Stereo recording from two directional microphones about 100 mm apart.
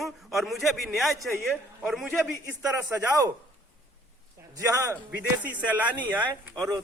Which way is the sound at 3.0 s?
35° right (ahead or behind).